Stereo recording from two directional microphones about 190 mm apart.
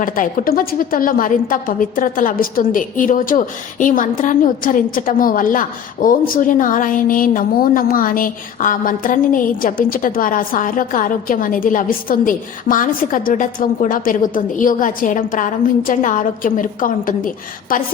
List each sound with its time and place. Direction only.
0.0 s a woman's voice: 45° left (ahead or behind)